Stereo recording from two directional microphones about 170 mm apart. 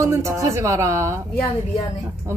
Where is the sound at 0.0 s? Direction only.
15° right (ahead or behind).